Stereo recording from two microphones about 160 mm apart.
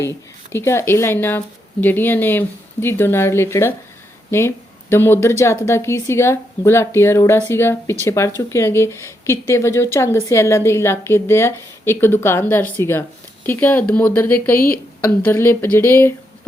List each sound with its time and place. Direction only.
0.5 s speech: 15° left (ahead or behind)